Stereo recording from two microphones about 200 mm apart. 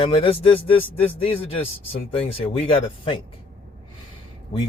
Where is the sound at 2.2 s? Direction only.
30° left (ahead or behind).